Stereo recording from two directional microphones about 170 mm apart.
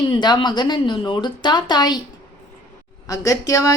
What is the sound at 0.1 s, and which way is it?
Speech, 25° left (ahead or behind).